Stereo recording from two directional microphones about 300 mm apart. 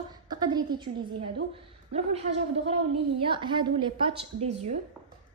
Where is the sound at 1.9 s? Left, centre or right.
Right.